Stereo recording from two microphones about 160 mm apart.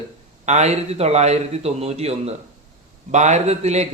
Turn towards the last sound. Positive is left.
turn(degrees=-45)  # may be behind; listen again after turning